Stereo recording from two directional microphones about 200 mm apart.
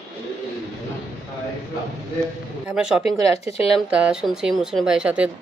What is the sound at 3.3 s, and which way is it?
Speech, 30° left (ahead or behind).